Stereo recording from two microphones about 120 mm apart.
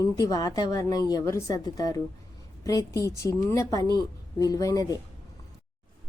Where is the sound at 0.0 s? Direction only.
30° left (ahead or behind).